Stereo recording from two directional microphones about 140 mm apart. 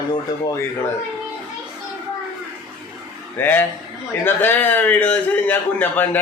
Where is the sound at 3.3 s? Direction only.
15° left (ahead or behind).